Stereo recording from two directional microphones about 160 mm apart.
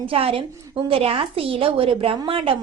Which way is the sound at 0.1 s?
35° right (ahead or behind).